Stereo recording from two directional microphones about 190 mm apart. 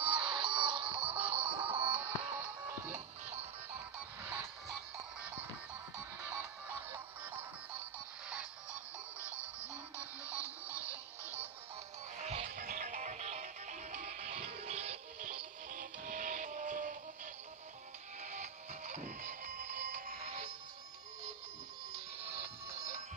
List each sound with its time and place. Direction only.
0.0 s music: 25° right (ahead or behind)
1.1 s music: 10° right (ahead or behind)
4.2 s music: 5° right (ahead or behind)
6.7 s music: 10° right (ahead or behind)
8.7 s music: 15° left (ahead or behind)
9.9 s music: 10° right (ahead or behind)
12.2 s music: 35° right (ahead or behind)
15.7 s music: 45° right (ahead or behind)
18.2 s music: 40° right (ahead or behind)
22.2 s music: 15° right (ahead or behind)